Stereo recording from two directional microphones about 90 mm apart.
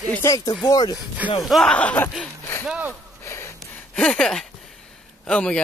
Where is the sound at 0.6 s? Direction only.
45° left (ahead or behind).